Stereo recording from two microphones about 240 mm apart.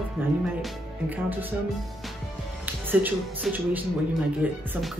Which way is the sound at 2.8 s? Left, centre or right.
Centre.